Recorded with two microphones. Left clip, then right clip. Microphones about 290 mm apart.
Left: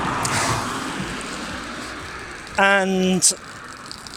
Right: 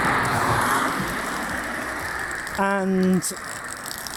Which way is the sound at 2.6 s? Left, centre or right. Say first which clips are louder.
Left 6 dB; left.